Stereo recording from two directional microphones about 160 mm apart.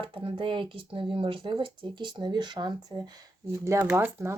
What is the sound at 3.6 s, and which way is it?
Speech, 15° right (ahead or behind).